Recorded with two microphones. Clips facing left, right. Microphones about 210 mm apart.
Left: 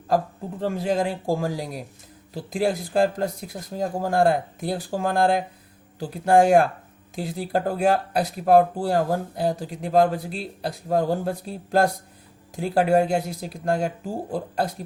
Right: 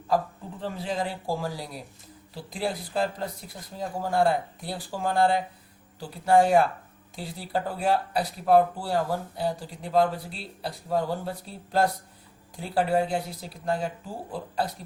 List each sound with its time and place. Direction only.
0.8 s speech: 45° left (ahead or behind)